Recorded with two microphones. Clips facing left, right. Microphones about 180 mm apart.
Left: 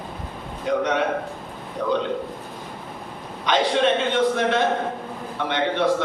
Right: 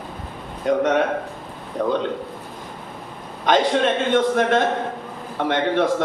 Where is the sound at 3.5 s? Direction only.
45° right (ahead or behind).